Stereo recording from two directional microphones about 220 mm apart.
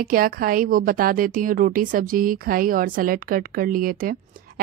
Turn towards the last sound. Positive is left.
turn(degrees=-40)  # may be behind; listen again after turning